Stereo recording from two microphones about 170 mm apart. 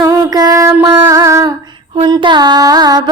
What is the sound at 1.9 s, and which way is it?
Mantra, 30° right (ahead or behind).